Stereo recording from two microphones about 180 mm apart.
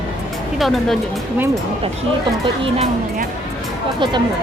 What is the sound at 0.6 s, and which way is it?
Speech, centre (ahead or behind).